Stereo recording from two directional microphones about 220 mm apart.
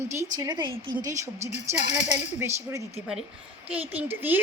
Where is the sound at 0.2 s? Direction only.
15° right (ahead or behind).